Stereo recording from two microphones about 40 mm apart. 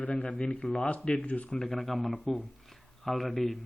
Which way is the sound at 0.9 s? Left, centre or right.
Left.